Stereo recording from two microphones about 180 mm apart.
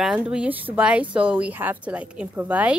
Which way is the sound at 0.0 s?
5° right (ahead or behind).